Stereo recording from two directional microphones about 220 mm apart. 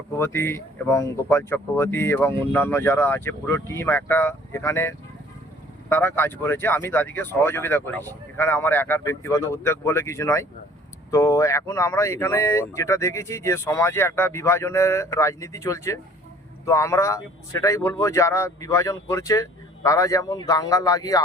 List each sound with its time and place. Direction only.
0.2 s speech: 10° left (ahead or behind)